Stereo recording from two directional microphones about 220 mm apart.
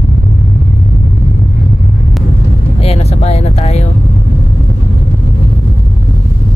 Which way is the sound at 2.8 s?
25° left (ahead or behind).